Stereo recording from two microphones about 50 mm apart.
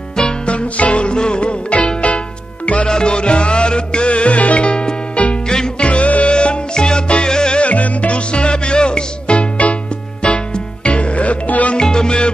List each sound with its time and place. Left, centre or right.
0.5 s music: left
11.7 s music: centre